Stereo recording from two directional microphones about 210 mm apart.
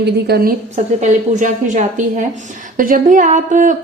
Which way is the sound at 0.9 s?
35° right (ahead or behind).